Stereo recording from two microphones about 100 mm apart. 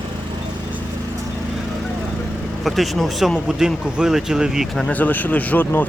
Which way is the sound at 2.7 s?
Centre (ahead or behind).